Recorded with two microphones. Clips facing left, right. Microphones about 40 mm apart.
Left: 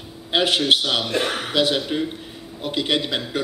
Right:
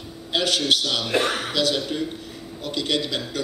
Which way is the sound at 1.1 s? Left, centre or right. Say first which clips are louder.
Right 1 dB; centre.